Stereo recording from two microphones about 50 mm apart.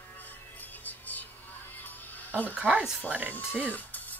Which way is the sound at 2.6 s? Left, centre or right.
Right.